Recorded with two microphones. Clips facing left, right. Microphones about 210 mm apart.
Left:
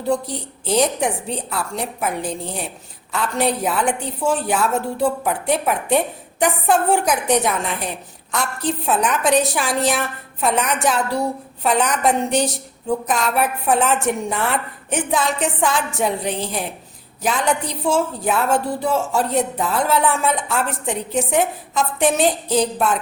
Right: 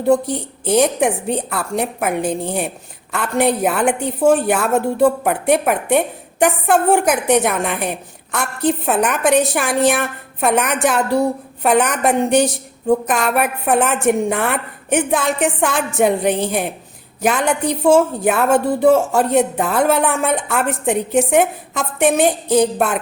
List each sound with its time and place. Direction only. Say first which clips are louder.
0.0 s a woman's voice: right 6 dB; 55° right (ahead or behind)